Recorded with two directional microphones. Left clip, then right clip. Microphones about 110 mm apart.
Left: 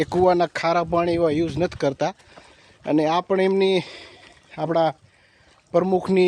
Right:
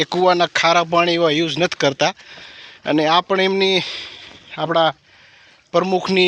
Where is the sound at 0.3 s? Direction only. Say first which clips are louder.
Right 7 dB; 30° left (ahead or behind).